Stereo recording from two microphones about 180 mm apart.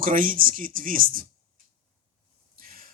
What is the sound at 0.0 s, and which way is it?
A man's voice, 50° right (ahead or behind).